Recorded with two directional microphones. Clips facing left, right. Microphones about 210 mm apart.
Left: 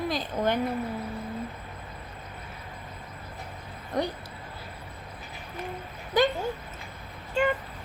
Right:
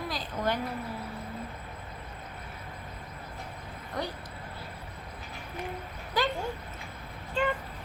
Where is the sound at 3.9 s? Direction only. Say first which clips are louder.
Left 6 dB; 20° left (ahead or behind).